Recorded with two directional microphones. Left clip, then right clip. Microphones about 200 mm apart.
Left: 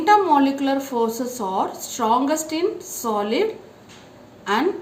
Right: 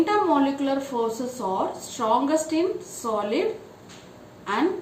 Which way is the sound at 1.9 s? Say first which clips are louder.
Left 2 dB; 50° left (ahead or behind).